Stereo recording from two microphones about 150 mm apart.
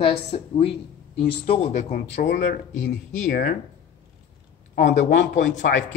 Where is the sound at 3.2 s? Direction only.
75° left (ahead or behind).